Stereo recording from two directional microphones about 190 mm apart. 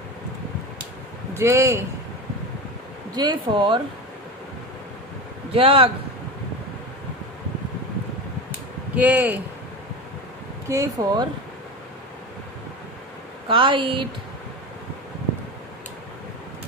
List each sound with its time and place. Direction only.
1.3 s a man's voice: 15° right (ahead or behind)
3.2 s speech: 25° right (ahead or behind)
5.5 s speech: 30° right (ahead or behind)
8.9 s a man's voice: 10° right (ahead or behind)
10.7 s speech: 20° right (ahead or behind)
13.5 s speech: 25° right (ahead or behind)